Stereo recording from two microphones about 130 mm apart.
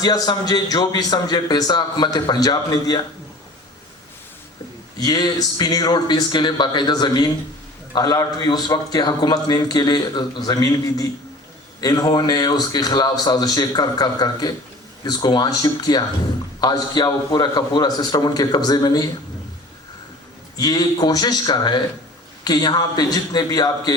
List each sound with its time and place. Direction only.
0.0 s a man's voice: 30° left (ahead or behind)
4.9 s a man's voice: 30° left (ahead or behind)
20.6 s a man's voice: 30° left (ahead or behind)